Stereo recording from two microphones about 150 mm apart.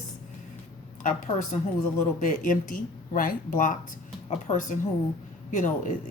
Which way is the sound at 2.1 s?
60° left (ahead or behind).